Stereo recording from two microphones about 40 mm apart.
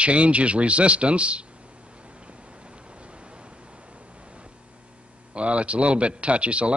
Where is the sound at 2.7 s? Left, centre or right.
Right.